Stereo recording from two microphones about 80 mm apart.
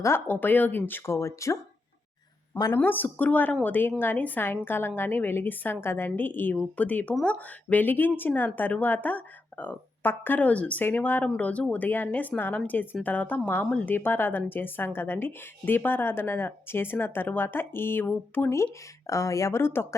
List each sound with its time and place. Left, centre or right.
0.3 s speech: left
2.7 s speech: left